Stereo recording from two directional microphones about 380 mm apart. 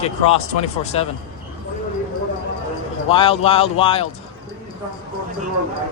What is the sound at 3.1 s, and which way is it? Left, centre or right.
Speech, centre.